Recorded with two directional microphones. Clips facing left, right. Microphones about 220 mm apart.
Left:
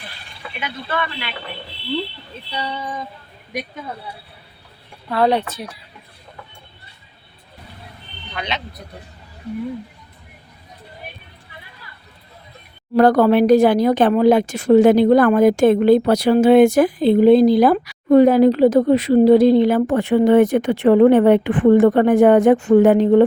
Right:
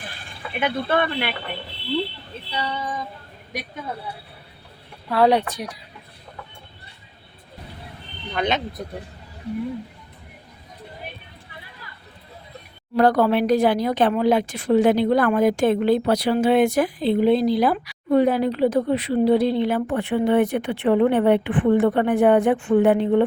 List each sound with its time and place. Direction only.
0.6 s speech: 55° right (ahead or behind)
5.0 s speech: 10° right (ahead or behind)
8.4 s speech: 50° right (ahead or behind)
13.0 s speech: 45° left (ahead or behind)
18.6 s speech: 90° left
19.5 s speech: 40° left (ahead or behind)